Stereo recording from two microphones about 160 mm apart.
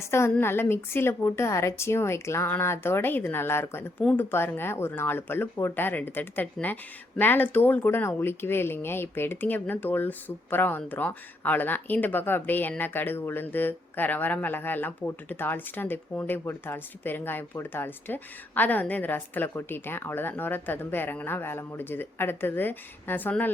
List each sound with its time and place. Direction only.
0.0 s speech: 15° left (ahead or behind)